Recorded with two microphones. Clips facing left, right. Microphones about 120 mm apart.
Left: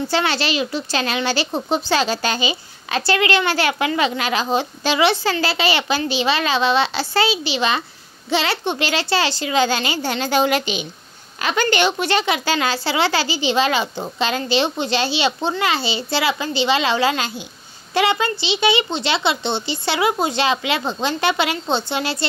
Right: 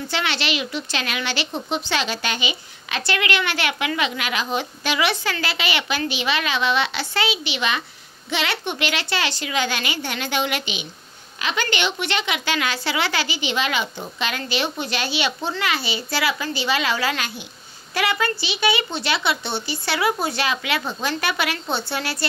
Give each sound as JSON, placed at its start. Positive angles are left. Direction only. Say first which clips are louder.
{"t": 0.1, "sound": "speech", "louder": "left 3 dB", "side_deg": 35}